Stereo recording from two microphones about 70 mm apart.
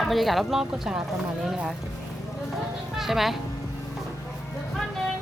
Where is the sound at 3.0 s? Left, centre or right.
Centre.